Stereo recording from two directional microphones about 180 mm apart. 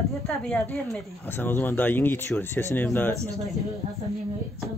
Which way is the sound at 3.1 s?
20° right (ahead or behind).